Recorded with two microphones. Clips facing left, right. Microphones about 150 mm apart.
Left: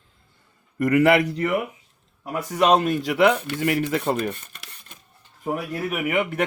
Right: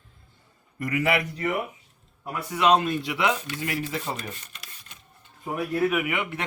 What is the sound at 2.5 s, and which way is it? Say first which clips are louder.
Speech: left 3 dB; 45° left (ahead or behind).